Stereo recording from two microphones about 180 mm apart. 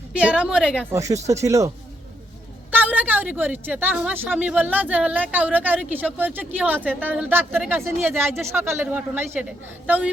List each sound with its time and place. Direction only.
0.2 s a woman's voice: 5° right (ahead or behind)
0.9 s speech: 15° right (ahead or behind)
2.7 s speech: 10° right (ahead or behind)